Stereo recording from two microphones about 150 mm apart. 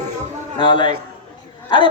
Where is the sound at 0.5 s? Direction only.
30° left (ahead or behind).